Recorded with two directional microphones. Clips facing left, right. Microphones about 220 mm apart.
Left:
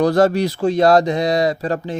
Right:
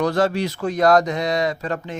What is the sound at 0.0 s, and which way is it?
Speech, 40° left (ahead or behind).